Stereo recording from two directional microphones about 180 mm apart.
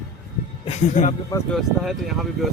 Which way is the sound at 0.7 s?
40° left (ahead or behind).